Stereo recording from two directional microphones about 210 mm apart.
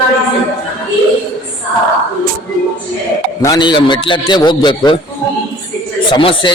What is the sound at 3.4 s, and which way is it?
A man's voice, 20° left (ahead or behind).